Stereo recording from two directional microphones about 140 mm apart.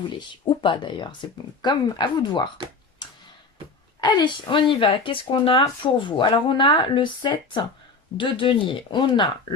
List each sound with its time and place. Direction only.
0.2 s speech: 35° left (ahead or behind)
4.0 s speech: 35° left (ahead or behind)